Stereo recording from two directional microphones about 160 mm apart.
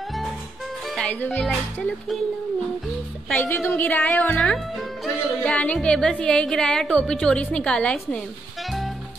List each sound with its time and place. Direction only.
0.8 s music: 5° left (ahead or behind)
1.4 s speech: centre (ahead or behind)
3.3 s speech: 10° left (ahead or behind)
8.6 s music: centre (ahead or behind)